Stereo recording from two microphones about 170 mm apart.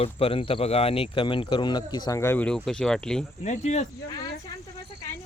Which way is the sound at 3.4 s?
45° left (ahead or behind).